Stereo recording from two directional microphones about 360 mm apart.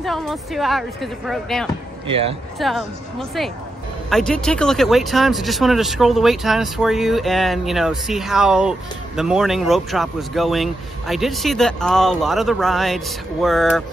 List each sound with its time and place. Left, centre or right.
0.0 s speech: centre
2.0 s speech: centre
2.6 s speech: centre